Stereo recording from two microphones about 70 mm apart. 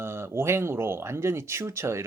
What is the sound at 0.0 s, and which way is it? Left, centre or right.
Speech, right.